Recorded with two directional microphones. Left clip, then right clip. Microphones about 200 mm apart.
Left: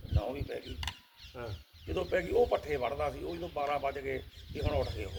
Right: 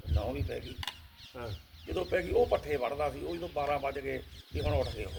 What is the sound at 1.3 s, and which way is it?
Speech, 20° right (ahead or behind).